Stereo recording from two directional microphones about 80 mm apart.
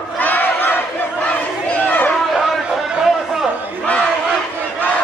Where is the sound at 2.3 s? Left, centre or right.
Centre.